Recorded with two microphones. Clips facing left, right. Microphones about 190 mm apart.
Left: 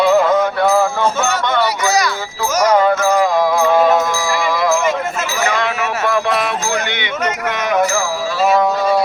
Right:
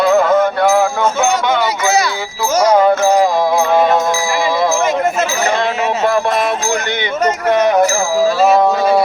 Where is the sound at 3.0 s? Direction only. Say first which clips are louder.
Right 3 dB; 30° right (ahead or behind).